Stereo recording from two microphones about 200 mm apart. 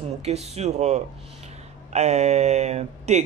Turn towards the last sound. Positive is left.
turn(degrees=-35)  # may be behind; listen again after turning